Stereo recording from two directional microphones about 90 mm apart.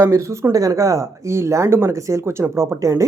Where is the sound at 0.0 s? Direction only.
35° right (ahead or behind).